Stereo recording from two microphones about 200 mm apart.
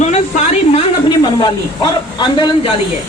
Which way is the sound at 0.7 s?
20° left (ahead or behind).